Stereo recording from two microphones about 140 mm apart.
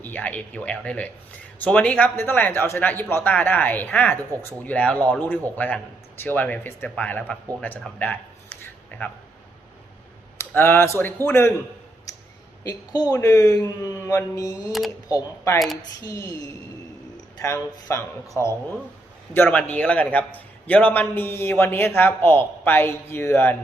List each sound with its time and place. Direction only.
0.0 s a man's voice: 10° left (ahead or behind)
7.8 s a sound: 10° left (ahead or behind)
10.3 s a man's voice: 20° left (ahead or behind)
12.6 s a man's voice: 25° left (ahead or behind)
15.5 s speech: centre (ahead or behind)
16.0 s a man's voice: 20° left (ahead or behind)
17.4 s a man's voice: 20° left (ahead or behind)